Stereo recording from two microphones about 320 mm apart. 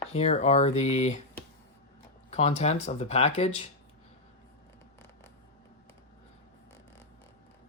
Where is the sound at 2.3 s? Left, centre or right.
Centre.